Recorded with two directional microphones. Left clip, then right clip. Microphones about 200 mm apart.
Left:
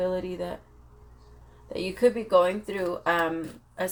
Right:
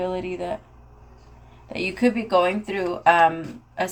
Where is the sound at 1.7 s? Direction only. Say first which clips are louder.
Right 1 dB; 35° left (ahead or behind).